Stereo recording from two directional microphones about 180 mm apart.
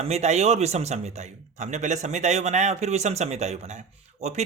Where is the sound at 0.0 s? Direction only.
40° right (ahead or behind).